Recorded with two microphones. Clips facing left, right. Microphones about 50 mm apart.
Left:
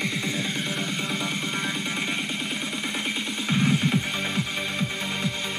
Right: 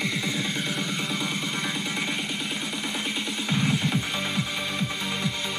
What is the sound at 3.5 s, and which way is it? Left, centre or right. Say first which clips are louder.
Music: left 2 dB; left.